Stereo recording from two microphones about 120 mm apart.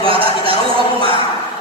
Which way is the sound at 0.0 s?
50° right (ahead or behind).